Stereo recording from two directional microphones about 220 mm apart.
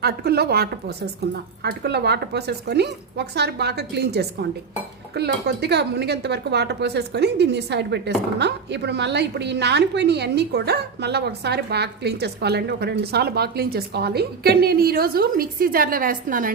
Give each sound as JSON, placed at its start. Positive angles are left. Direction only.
{"t": 0.0, "sound": "speech", "side_deg": -45}